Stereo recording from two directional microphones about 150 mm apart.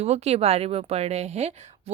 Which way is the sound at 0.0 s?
45° right (ahead or behind).